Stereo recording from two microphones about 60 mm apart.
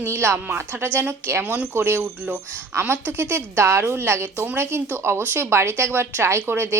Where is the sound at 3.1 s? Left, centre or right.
Right.